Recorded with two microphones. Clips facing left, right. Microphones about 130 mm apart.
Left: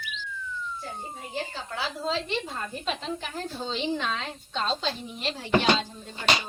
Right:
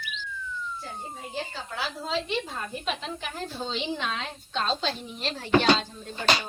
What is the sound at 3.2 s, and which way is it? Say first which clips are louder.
A woman's voice: even; 5° right (ahead or behind).